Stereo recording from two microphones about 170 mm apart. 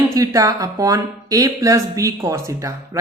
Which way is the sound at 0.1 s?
20° right (ahead or behind).